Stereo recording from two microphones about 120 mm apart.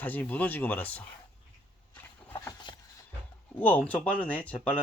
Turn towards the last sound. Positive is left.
turn(degrees=10)  # may be behind; listen again after turning